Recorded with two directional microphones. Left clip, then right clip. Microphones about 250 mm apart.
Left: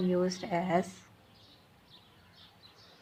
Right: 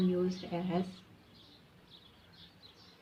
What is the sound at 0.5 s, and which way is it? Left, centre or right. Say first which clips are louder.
Speech: left 7 dB; left.